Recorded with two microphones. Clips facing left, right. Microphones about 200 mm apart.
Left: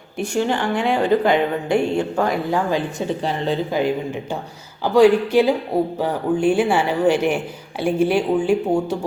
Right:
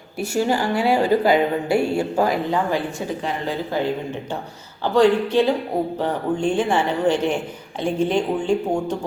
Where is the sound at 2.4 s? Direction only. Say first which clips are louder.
Left 1 dB; 15° left (ahead or behind).